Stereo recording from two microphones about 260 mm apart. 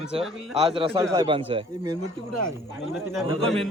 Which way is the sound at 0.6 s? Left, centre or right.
Centre.